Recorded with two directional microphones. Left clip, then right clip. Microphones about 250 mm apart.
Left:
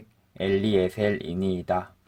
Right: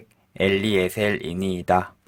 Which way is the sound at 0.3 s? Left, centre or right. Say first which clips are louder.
Right 3 dB; right.